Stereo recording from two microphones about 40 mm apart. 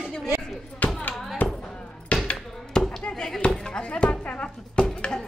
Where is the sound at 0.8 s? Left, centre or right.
Left.